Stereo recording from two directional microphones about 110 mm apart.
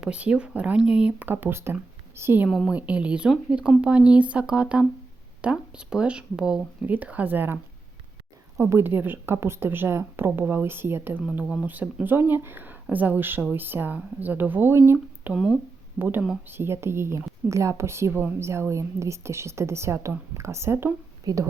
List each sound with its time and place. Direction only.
0.0 s speech: 10° right (ahead or behind)
2.5 s a woman's voice: centre (ahead or behind)
2.7 s a woman's voice: 10° right (ahead or behind)
15.3 s speech: 5° right (ahead or behind)
16.0 s a woman's voice: 15° right (ahead or behind)
21.3 s a woman's voice: 35° right (ahead or behind)